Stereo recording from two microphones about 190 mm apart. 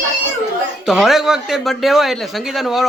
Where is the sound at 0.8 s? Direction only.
Centre (ahead or behind).